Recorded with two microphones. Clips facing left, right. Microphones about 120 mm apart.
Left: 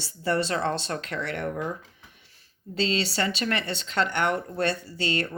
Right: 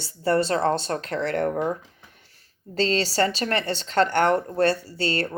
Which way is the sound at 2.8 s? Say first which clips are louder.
Right 4 dB; 40° right (ahead or behind).